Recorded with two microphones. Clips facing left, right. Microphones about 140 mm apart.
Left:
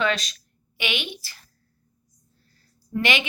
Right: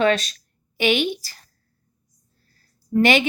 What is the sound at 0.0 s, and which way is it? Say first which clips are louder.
Speech: right 6 dB; 40° right (ahead or behind).